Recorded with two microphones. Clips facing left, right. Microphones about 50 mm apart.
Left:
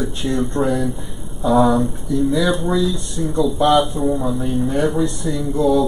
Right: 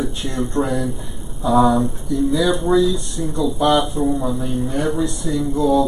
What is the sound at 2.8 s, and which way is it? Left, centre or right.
Speech, centre.